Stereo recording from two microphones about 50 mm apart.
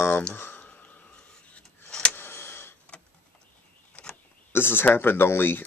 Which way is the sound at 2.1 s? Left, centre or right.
Left.